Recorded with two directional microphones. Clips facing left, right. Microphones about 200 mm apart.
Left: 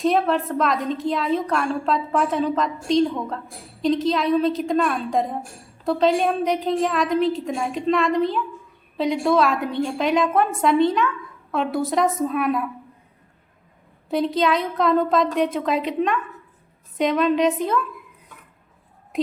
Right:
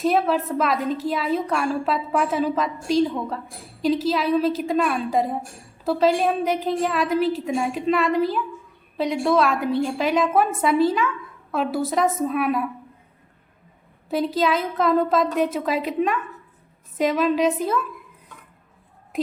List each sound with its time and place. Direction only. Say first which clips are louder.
0.0 s a woman's voice: left 1 dB; 5° right (ahead or behind)
14.1 s a woman's voice: left 1 dB; 5° right (ahead or behind)